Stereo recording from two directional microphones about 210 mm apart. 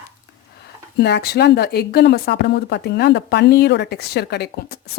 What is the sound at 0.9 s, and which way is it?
Speech, 50° left (ahead or behind).